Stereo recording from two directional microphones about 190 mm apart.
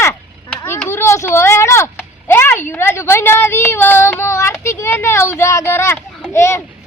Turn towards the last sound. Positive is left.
turn(degrees=15)  # may be behind; listen again after turning